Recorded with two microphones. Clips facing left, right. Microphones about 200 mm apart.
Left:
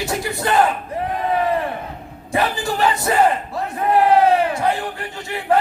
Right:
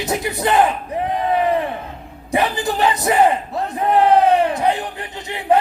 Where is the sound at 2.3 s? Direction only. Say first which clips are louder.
Right 2 dB; 20° right (ahead or behind).